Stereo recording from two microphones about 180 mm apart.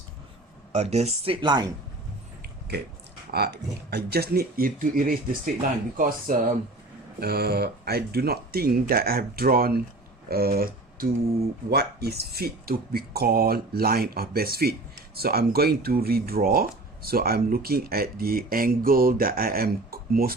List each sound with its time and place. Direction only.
0.7 s speech: 35° right (ahead or behind)
3.3 s speech: 60° right (ahead or behind)